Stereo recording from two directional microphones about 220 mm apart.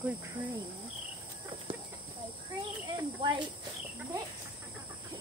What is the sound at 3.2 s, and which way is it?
Speech, 20° right (ahead or behind).